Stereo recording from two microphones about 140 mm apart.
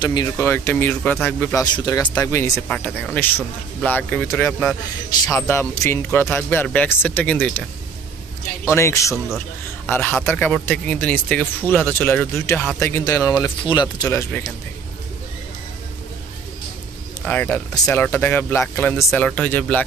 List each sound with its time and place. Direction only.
0.0 s speech: 30° left (ahead or behind)
0.4 s speech: 15° left (ahead or behind)
1.6 s speech: 30° left (ahead or behind)
2.1 s speech: 20° left (ahead or behind)
2.7 s speech: 10° left (ahead or behind)
8.6 s a man's voice: 20° left (ahead or behind)
14.0 s speech: 20° left (ahead or behind)
17.2 s speech: 10° left (ahead or behind)